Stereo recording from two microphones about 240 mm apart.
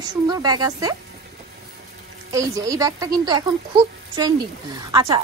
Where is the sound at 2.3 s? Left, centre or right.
Centre.